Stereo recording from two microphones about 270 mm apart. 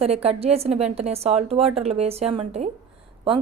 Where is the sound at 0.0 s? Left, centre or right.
Right.